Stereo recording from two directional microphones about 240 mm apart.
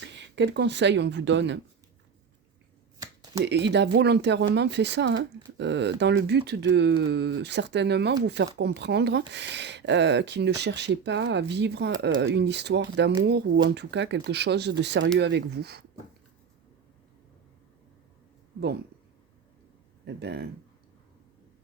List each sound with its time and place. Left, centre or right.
0.0 s speech: right
3.0 s finger snapping: centre
3.4 s speech: right
20.1 s speech: right